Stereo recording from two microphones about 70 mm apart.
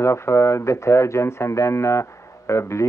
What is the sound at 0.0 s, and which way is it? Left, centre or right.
Speech, left.